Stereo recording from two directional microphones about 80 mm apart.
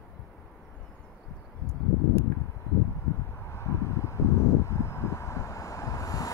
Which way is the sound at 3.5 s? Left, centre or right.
Left.